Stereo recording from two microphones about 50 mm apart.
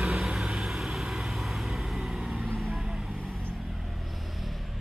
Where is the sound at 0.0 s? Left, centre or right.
Centre.